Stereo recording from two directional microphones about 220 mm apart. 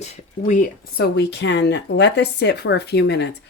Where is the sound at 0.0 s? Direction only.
35° left (ahead or behind).